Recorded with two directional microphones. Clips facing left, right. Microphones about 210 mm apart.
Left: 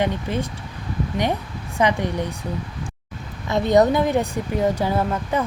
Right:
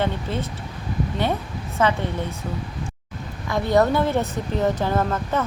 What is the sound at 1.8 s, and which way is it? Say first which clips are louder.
Speech: left 1 dB; 15° left (ahead or behind).